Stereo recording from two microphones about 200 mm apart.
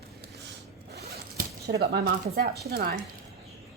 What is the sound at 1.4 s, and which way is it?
A woman's voice, 50° right (ahead or behind).